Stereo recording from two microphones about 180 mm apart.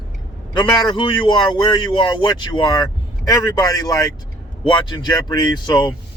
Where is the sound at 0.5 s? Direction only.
25° left (ahead or behind).